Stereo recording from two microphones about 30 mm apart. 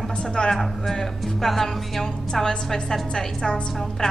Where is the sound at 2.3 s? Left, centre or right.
Left.